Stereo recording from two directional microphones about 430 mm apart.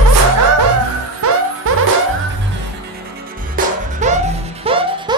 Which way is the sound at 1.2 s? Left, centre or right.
Right.